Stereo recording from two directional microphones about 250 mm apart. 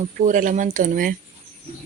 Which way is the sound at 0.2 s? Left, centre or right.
Right.